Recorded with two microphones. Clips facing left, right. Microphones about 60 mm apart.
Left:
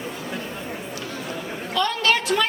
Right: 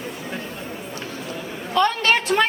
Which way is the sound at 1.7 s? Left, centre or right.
Right.